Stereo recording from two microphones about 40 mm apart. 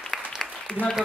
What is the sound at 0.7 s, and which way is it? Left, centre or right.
Applause, left.